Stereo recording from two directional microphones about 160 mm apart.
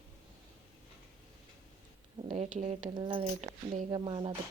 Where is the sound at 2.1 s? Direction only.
40° right (ahead or behind).